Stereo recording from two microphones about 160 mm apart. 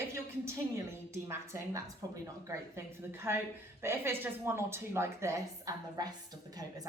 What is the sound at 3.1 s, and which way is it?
A woman's voice, 15° right (ahead or behind).